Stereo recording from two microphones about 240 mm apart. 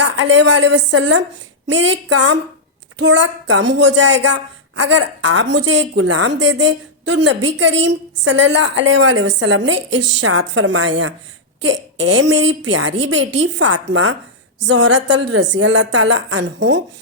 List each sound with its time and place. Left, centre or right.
0.0 s a woman's voice: right